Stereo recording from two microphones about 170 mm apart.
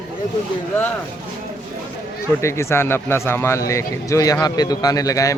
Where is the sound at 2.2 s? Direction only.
15° left (ahead or behind).